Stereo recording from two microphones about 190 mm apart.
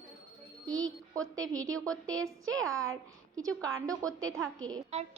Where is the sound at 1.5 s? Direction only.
20° right (ahead or behind).